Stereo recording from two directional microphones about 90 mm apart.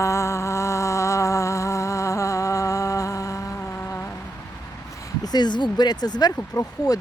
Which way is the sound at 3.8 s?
25° left (ahead or behind).